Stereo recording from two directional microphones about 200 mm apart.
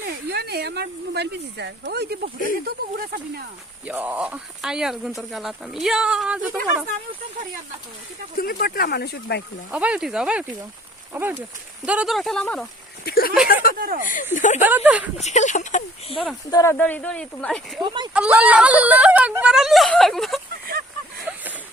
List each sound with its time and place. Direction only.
0.3 s speech: 55° right (ahead or behind)
3.8 s speech: 10° right (ahead or behind)
8.4 s speech: 50° left (ahead or behind)
9.7 s speech: 5° right (ahead or behind)
13.1 s speech: 50° left (ahead or behind)
13.7 s speech: 45° right (ahead or behind)
14.0 s speech: 40° left (ahead or behind)
14.6 s speech: 10° right (ahead or behind)
15.2 s speech: 35° left (ahead or behind)
16.5 s speech: 15° left (ahead or behind)
17.8 s speech: 20° right (ahead or behind)
18.1 s speech: 5° right (ahead or behind)
21.3 s a sound: 10° right (ahead or behind)